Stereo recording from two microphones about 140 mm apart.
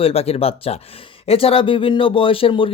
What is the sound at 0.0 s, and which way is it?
Speech, 45° left (ahead or behind).